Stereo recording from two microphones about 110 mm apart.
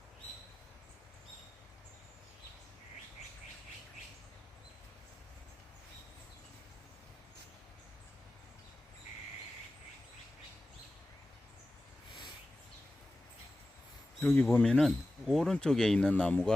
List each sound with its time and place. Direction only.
14.2 s speech: 20° left (ahead or behind)
14.6 s speech: 5° left (ahead or behind)